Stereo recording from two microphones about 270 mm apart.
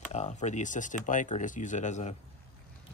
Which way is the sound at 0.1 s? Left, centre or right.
Left.